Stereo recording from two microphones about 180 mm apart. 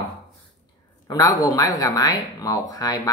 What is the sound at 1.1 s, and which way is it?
Speech, 20° left (ahead or behind).